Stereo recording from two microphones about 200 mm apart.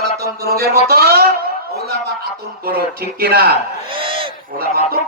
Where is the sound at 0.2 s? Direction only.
50° right (ahead or behind).